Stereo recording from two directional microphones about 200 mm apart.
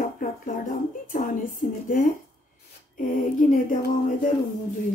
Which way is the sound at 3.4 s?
40° left (ahead or behind).